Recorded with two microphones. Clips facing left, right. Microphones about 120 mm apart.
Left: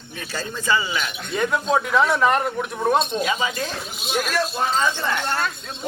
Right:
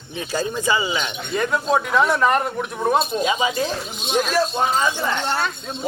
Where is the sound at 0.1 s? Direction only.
15° right (ahead or behind).